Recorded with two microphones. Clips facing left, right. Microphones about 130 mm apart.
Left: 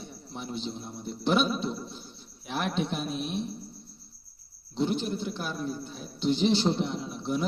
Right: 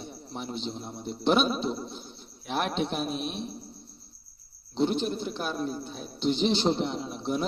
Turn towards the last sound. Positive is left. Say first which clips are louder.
# right 1 dB
turn(degrees=-25)  # may be behind; listen again after turning